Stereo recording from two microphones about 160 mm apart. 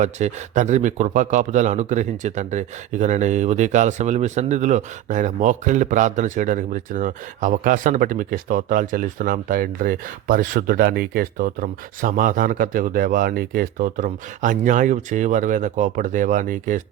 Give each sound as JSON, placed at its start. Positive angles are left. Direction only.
{"t": 0.0, "sound": "speech", "side_deg": -45}